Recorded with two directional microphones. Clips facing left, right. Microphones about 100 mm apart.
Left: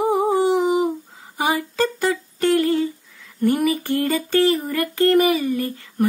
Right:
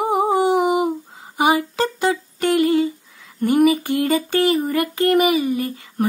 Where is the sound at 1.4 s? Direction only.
15° right (ahead or behind).